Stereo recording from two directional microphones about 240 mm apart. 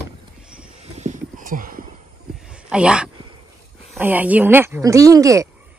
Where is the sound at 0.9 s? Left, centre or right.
Right.